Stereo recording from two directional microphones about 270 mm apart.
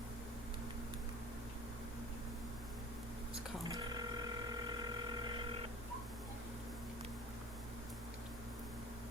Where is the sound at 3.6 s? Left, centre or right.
Centre.